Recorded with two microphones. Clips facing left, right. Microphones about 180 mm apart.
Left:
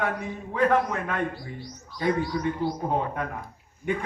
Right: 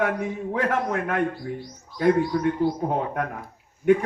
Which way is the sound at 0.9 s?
60° right (ahead or behind).